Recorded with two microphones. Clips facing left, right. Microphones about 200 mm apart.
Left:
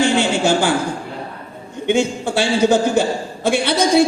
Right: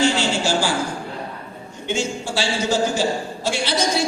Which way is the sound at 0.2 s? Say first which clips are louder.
Left 5 dB; 55° left (ahead or behind).